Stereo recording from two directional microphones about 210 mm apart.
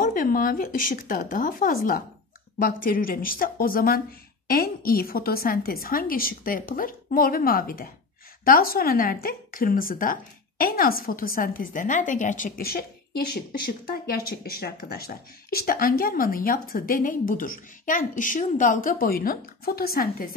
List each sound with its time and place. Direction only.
0.0 s a woman's voice: 40° left (ahead or behind)